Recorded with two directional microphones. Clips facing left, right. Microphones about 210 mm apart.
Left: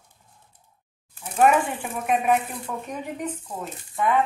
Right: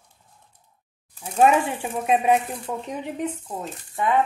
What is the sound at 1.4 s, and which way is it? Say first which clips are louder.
Speech: right 1 dB; 25° right (ahead or behind).